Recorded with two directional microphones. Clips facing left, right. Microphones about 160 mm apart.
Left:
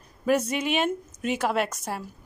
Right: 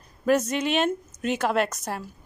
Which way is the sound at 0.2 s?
10° left (ahead or behind).